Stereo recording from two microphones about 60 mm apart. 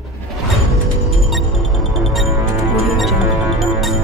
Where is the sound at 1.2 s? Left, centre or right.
Centre.